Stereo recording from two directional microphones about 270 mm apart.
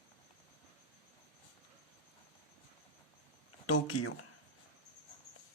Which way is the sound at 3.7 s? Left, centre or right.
Left.